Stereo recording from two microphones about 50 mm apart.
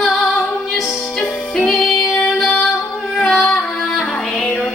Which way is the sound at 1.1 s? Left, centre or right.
Centre.